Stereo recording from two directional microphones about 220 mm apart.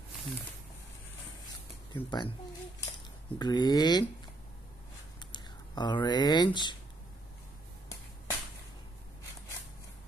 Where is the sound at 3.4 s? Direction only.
20° left (ahead or behind).